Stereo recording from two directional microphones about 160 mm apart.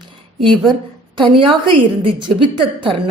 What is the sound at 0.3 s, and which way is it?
A woman's voice, 30° right (ahead or behind).